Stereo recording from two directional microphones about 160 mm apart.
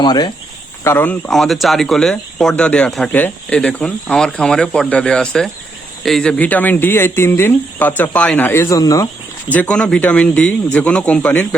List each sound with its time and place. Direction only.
0.0 s speech: 25° left (ahead or behind)
0.9 s speech: 10° left (ahead or behind)
9.5 s speech: 10° left (ahead or behind)